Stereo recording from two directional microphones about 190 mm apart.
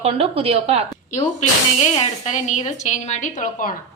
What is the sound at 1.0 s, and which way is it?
A woman's voice, 40° left (ahead or behind).